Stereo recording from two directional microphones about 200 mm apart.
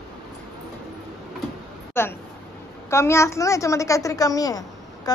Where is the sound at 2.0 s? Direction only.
10° left (ahead or behind).